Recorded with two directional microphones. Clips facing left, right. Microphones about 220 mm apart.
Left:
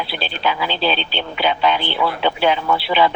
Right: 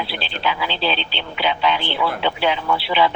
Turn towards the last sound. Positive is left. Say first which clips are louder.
# left 2 dB
turn(degrees=45)  # may be behind; listen again after turning